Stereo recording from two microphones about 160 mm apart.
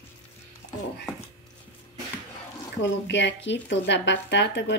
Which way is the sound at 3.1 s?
90° left.